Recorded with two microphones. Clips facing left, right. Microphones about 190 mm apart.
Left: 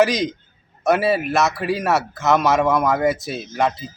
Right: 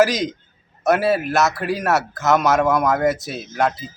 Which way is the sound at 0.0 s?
Centre (ahead or behind).